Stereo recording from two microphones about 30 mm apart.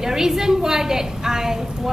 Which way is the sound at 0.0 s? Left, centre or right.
Centre.